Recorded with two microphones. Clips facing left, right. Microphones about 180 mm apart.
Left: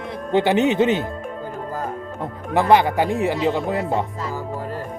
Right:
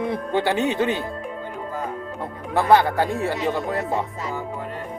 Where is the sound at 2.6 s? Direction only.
20° left (ahead or behind).